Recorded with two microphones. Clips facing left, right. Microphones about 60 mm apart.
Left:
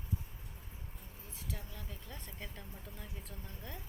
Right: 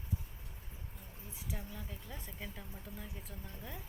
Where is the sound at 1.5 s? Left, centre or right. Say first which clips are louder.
Right 3 dB; centre.